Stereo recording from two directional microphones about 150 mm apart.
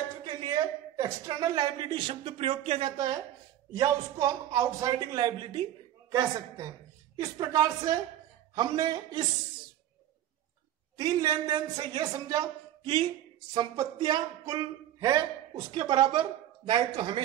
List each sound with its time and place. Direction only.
0.2 s speech: 30° right (ahead or behind)
3.7 s a woman's voice: 25° right (ahead or behind)
11.0 s a woman's voice: 25° right (ahead or behind)